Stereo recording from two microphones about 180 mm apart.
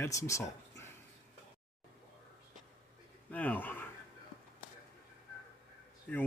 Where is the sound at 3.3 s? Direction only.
10° left (ahead or behind).